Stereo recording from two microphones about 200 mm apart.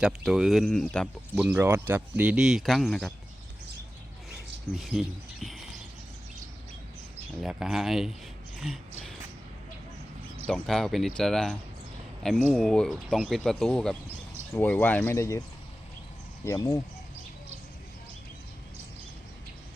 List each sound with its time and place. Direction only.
0.0 s speech: centre (ahead or behind)
1.4 s speech: 10° right (ahead or behind)
4.3 s a sound: centre (ahead or behind)
7.4 s speech: centre (ahead or behind)
10.4 s speech: centre (ahead or behind)
12.6 s speech: 5° left (ahead or behind)